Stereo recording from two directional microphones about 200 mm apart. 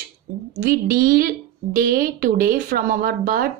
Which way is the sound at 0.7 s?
45° right (ahead or behind).